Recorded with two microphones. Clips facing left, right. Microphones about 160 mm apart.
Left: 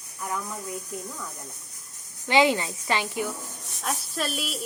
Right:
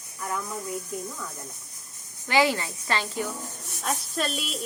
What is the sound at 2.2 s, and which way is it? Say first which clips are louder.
A woman's voice: left 2 dB; 20° left (ahead or behind).